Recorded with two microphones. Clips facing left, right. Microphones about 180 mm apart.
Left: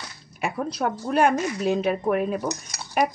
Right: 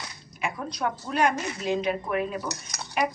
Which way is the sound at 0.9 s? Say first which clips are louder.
Left 4 dB; 45° left (ahead or behind).